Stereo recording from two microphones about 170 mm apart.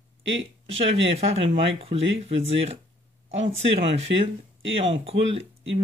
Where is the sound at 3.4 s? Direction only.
90° right.